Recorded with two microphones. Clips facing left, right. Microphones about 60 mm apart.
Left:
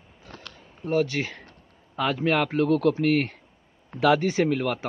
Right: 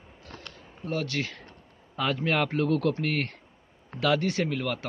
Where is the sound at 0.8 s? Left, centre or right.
Centre.